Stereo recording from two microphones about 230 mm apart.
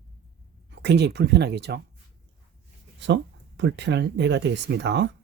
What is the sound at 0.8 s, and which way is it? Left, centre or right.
Speech, right.